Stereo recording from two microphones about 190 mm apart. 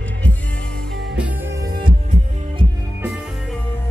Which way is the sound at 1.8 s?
25° right (ahead or behind).